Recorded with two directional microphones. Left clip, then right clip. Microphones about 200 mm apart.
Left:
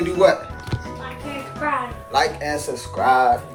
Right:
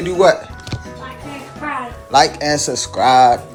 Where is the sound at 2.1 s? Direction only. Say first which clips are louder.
Right 7 dB; 25° right (ahead or behind).